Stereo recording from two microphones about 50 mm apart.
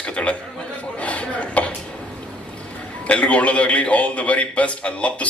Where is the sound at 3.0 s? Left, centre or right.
Left.